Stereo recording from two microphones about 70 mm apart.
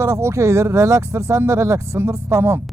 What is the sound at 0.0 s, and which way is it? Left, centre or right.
Speech, right.